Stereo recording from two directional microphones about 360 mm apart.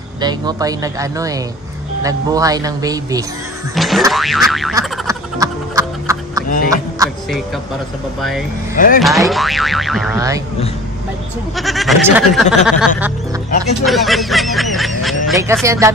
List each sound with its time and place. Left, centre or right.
0.2 s speech: centre
3.7 s boing: centre
6.7 s music: centre
8.2 s speech: centre
8.7 s speech: left
9.0 s speech: centre
11.5 s speech: centre